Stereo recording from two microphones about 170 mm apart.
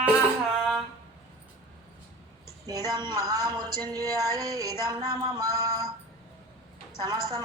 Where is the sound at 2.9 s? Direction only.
25° right (ahead or behind).